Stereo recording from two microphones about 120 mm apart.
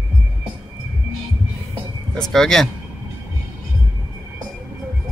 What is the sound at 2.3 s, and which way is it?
Speech, 5° left (ahead or behind).